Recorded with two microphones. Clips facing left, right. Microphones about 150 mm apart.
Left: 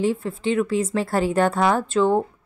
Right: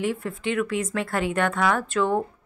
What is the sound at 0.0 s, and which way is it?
A woman's voice, 30° left (ahead or behind).